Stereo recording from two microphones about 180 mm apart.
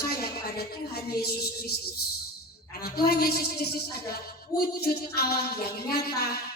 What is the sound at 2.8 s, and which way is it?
A woman's voice, 60° left (ahead or behind).